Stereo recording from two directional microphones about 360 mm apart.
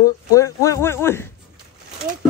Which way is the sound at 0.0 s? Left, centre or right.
Centre.